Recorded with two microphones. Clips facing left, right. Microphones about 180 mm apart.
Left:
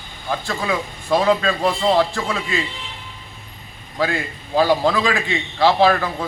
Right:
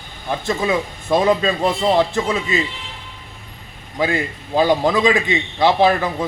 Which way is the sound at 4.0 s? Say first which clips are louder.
Right 2 dB; 20° right (ahead or behind).